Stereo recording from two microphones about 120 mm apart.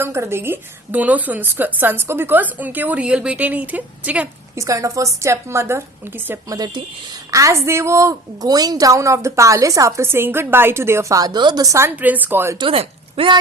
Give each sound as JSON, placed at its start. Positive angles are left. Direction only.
{"t": 0.0, "sound": "a woman's voice", "side_deg": -20}
{"t": 4.5, "sound": "a woman's voice", "side_deg": -25}
{"t": 6.5, "sound": "a woman's voice", "side_deg": -35}
{"t": 11.9, "sound": "a woman's voice", "side_deg": -15}
{"t": 12.5, "sound": "speech", "side_deg": -50}